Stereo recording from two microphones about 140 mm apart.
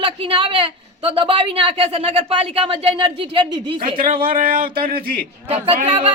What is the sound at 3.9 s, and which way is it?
Speech, 85° right.